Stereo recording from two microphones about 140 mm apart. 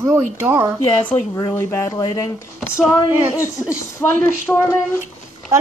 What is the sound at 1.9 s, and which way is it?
Speech, 25° left (ahead or behind).